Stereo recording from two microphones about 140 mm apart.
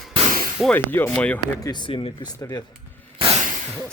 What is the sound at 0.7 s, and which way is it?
Speech, 15° left (ahead or behind).